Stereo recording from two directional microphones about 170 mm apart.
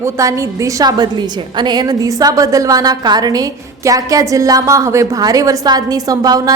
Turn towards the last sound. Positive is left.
turn(degrees=-20)  # may be behind; listen again after turning